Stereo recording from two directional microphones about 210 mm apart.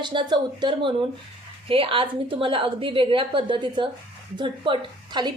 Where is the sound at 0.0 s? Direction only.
20° right (ahead or behind).